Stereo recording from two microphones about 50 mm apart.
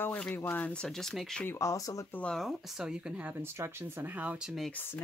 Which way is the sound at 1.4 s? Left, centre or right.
Centre.